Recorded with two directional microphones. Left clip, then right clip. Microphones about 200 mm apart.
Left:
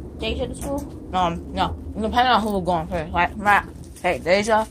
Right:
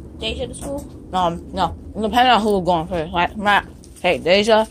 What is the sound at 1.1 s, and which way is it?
Speech, 45° right (ahead or behind).